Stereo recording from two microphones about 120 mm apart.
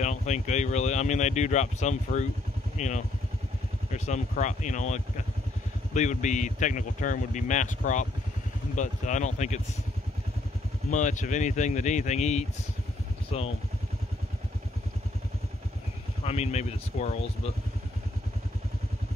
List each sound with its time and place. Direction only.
0.0 s speech: 75° left (ahead or behind)
10.9 s speech: 90° left
13.3 s speech: 60° left (ahead or behind)
16.3 s speech: 65° left (ahead or behind)